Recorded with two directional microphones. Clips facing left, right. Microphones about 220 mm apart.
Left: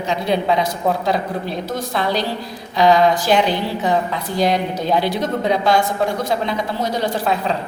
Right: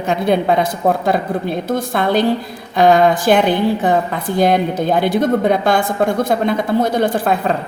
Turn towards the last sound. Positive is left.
turn(degrees=-50)  # may be behind; listen again after turning